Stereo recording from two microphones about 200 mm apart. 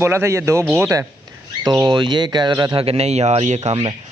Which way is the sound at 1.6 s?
25° right (ahead or behind).